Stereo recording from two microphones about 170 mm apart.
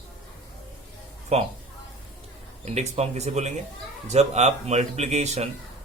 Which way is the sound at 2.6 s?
40° right (ahead or behind).